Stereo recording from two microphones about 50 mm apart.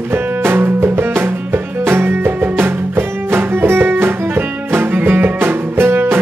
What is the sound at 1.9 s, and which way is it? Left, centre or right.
Music, right.